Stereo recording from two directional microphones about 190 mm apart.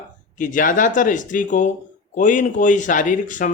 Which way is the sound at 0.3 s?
45° left (ahead or behind).